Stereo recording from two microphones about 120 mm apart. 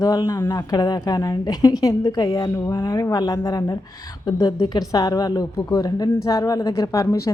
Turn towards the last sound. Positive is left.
turn(degrees=25)  # may be behind; listen again after turning